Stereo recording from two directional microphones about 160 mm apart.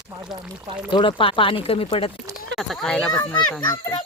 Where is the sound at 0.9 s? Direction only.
30° left (ahead or behind).